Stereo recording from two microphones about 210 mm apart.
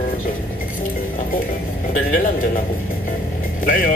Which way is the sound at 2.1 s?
40° left (ahead or behind).